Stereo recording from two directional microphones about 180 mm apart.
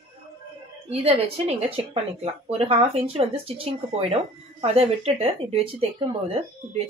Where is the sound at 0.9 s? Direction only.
35° right (ahead or behind).